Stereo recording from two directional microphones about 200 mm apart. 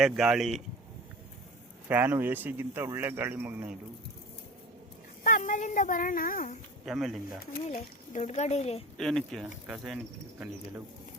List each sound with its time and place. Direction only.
0.0 s speech: centre (ahead or behind)
1.9 s speech: 10° right (ahead or behind)
5.2 s a child's voice: 40° left (ahead or behind)
6.8 s speech: centre (ahead or behind)
7.7 s a child's voice: 35° left (ahead or behind)
9.0 s speech: centre (ahead or behind)